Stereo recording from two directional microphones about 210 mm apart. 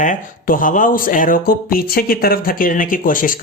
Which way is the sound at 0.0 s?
40° left (ahead or behind).